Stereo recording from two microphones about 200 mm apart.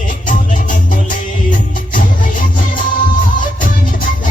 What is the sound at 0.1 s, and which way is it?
Music, 40° left (ahead or behind).